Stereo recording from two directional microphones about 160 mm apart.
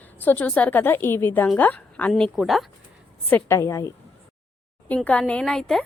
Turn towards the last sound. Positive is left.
turn(degrees=5)  # may be behind; listen again after turning